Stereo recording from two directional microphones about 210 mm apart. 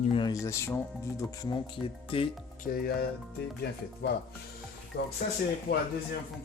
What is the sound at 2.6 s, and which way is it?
Speech, 45° left (ahead or behind).